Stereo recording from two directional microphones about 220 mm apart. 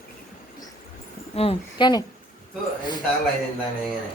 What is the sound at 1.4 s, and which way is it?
Speech, 25° left (ahead or behind).